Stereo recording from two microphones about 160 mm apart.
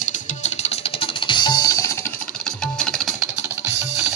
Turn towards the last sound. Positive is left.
turn(degrees=5)  # may be behind; listen again after turning